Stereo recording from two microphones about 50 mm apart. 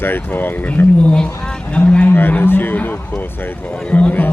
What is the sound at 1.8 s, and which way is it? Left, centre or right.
Speech, left.